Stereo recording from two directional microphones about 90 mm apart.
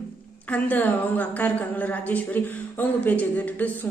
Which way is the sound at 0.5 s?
20° left (ahead or behind).